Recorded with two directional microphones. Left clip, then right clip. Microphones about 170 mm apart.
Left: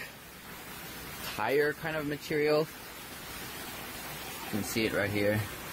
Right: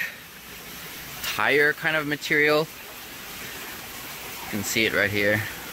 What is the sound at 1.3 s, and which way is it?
Speech, 5° right (ahead or behind).